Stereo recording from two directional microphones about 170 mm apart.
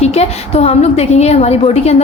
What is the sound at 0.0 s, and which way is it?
A woman's voice, 40° left (ahead or behind).